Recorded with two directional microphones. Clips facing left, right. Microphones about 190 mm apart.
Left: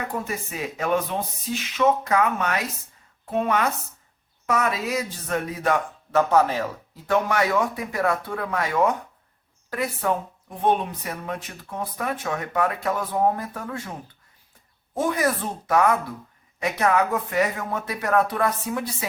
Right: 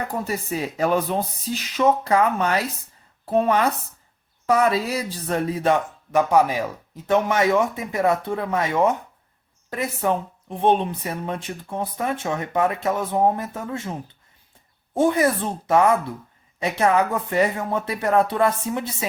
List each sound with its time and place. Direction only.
0.3 s speech: 35° right (ahead or behind)
14.9 s speech: 25° right (ahead or behind)